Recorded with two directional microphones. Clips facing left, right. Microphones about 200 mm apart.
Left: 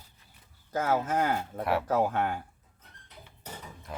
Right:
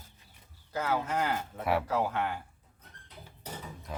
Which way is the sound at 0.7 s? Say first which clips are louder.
Left 3 dB; 45° left (ahead or behind).